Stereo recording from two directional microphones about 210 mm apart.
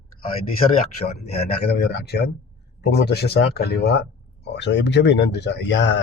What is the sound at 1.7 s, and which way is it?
Speech, 50° left (ahead or behind).